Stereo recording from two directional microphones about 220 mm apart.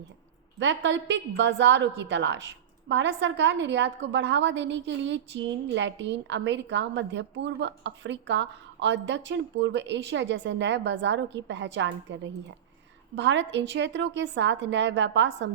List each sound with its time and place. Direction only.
0.6 s a woman's voice: 55° right (ahead or behind)